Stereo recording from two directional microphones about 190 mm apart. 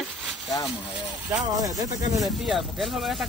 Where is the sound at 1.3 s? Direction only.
20° right (ahead or behind).